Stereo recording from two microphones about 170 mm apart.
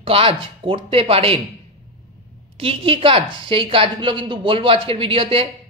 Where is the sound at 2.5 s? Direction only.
35° right (ahead or behind).